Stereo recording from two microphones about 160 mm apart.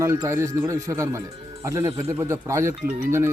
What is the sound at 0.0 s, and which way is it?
Speech, 20° right (ahead or behind).